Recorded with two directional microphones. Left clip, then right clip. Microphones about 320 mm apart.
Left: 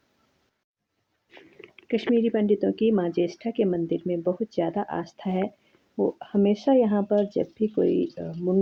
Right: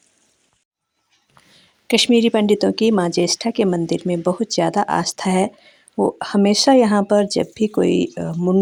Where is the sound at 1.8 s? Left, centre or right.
Right.